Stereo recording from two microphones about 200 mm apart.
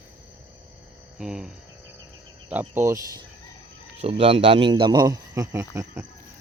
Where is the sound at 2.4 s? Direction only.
10° right (ahead or behind).